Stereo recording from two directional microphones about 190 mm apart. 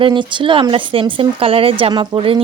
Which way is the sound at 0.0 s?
25° right (ahead or behind).